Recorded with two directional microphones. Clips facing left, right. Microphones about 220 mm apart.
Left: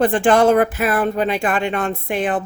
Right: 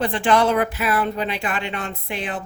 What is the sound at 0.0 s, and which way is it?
Speech, 50° left (ahead or behind).